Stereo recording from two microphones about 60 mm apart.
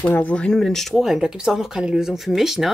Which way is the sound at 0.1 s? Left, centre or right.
Left.